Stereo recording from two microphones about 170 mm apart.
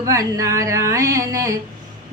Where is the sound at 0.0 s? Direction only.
20° right (ahead or behind).